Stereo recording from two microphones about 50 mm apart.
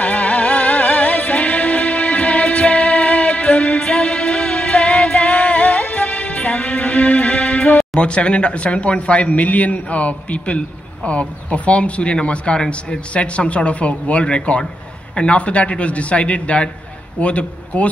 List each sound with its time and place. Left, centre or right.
0.0 s music: left
3.8 s music: centre
7.7 s speech: centre